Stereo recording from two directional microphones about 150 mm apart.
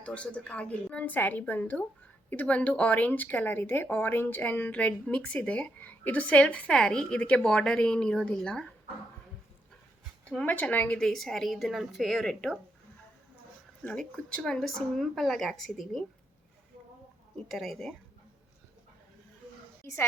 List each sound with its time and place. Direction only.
0.0 s speech: 10° left (ahead or behind)
10.2 s a woman's voice: 10° left (ahead or behind)
13.8 s a woman's voice: 5° left (ahead or behind)
17.5 s a woman's voice: centre (ahead or behind)
19.8 s a woman's voice: 15° left (ahead or behind)